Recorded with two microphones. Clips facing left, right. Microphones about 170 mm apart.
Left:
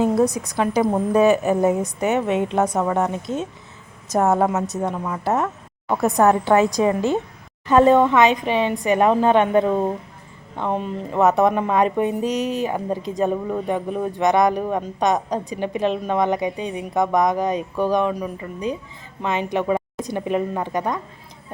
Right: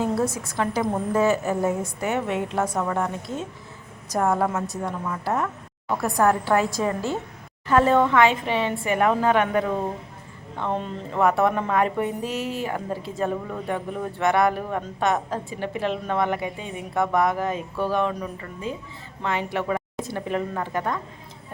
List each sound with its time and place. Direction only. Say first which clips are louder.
0.0 s a woman's voice: left 6 dB; 15° left (ahead or behind)